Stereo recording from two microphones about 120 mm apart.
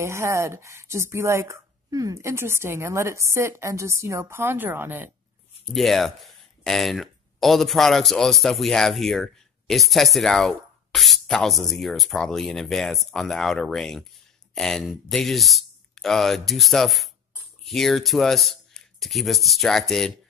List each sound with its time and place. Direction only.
0.0 s speech: 25° right (ahead or behind)
5.7 s speech: centre (ahead or behind)